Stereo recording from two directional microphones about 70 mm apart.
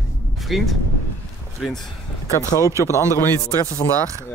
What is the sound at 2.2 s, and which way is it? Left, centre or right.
A man's voice, left.